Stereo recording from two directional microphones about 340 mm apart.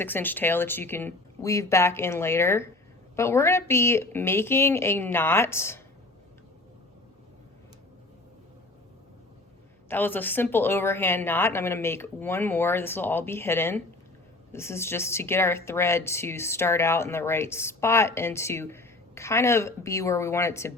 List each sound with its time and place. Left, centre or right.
0.0 s speech: centre
9.9 s speech: centre